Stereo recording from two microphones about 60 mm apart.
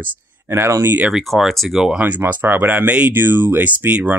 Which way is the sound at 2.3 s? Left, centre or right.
Right.